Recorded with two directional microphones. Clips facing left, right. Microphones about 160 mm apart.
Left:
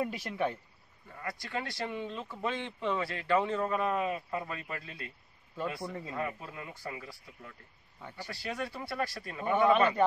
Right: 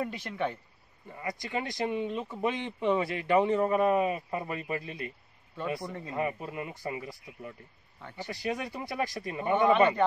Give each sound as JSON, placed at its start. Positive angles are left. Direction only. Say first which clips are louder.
{"t": 0.0, "sound": "speech", "louder": "even", "side_deg": 10}
{"t": 1.1, "sound": "speech", "louder": "right 4 dB", "side_deg": -20}
{"t": 5.8, "sound": "speech", "louder": "right 1 dB", "side_deg": 0}
{"t": 6.1, "sound": "speech", "louder": "right 9 dB", "side_deg": -15}